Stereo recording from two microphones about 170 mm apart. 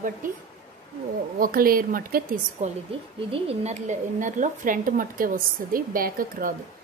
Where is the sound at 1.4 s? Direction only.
60° right (ahead or behind).